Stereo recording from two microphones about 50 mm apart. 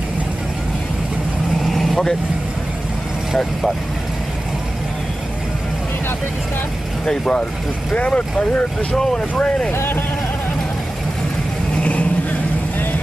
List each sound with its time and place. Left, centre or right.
1.7 s vehicle: centre
7.1 s speech: centre
9.7 s speech: left